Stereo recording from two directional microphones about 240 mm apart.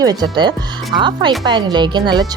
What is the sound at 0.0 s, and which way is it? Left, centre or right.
Speech, centre.